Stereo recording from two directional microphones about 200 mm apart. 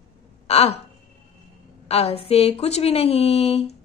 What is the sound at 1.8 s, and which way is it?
Speech, 30° left (ahead or behind).